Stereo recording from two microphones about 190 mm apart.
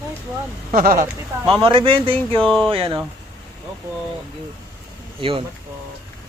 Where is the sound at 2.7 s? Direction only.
30° right (ahead or behind).